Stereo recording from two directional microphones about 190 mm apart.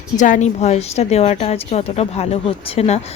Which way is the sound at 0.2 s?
40° left (ahead or behind).